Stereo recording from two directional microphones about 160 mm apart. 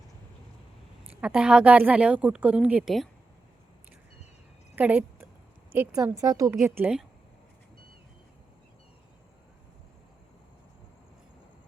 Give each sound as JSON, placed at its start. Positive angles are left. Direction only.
{"t": 1.2, "sound": "a woman's voice", "side_deg": -5}
{"t": 4.7, "sound": "a sound", "side_deg": -10}
{"t": 5.7, "sound": "a woman's voice", "side_deg": -10}